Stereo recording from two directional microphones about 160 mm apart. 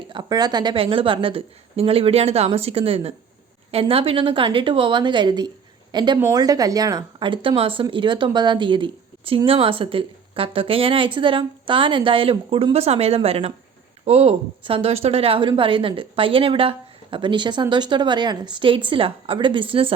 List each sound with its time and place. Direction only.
0.1 s a woman's voice: 25° right (ahead or behind)